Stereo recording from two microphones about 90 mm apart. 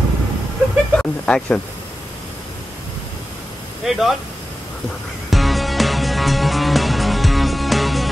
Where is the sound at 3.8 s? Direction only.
5° right (ahead or behind).